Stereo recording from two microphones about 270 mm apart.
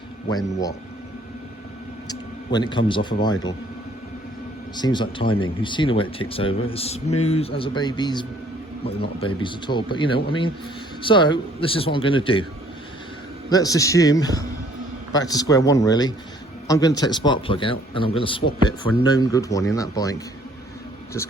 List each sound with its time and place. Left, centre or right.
0.3 s speech: centre
2.0 s speech: centre
4.8 s speech: centre
13.5 s speech: centre